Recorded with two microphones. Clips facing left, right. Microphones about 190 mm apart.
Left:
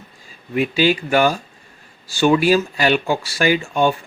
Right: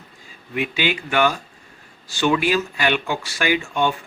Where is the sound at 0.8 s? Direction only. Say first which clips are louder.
Left 4 dB; 35° left (ahead or behind).